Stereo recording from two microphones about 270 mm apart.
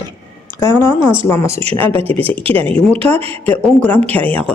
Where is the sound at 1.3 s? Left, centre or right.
Centre.